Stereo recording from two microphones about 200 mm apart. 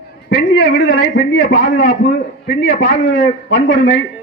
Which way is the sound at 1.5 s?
45° left (ahead or behind).